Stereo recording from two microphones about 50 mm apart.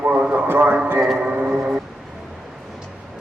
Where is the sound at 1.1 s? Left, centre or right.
Right.